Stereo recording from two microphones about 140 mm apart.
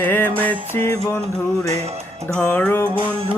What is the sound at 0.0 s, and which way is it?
Music, 15° left (ahead or behind).